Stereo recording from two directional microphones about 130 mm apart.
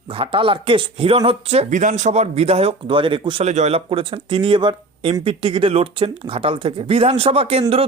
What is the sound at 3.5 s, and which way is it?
Speech, 60° right (ahead or behind).